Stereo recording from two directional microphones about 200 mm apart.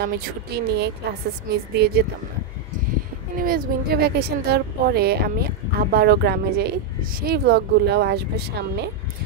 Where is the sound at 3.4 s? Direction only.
45° right (ahead or behind).